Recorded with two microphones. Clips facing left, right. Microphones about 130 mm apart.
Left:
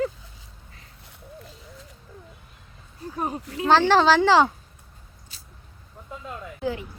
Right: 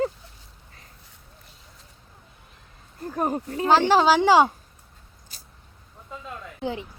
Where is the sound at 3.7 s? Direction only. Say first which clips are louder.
Even; 10° right (ahead or behind).